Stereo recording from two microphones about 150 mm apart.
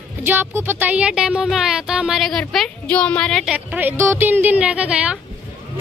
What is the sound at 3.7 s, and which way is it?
A woman's voice, 10° right (ahead or behind).